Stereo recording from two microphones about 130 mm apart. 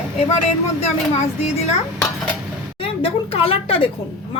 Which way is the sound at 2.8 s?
45° left (ahead or behind).